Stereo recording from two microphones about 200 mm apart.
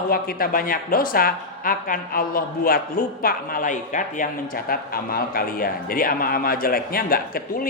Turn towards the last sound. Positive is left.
turn(degrees=45)  # may be behind; listen again after turning